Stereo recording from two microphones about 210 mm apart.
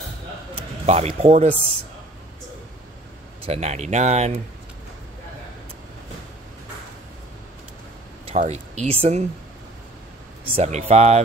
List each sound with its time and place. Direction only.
0.8 s speech: 30° right (ahead or behind)
3.4 s speech: 30° right (ahead or behind)
8.4 s speech: 35° right (ahead or behind)
10.4 s speech: 30° right (ahead or behind)